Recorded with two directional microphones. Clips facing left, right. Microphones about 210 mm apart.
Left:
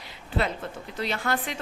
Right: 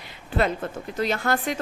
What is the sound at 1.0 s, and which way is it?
Speech, 45° right (ahead or behind).